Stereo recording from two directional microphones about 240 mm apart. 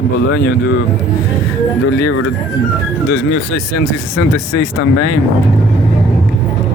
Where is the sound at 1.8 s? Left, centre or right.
Left.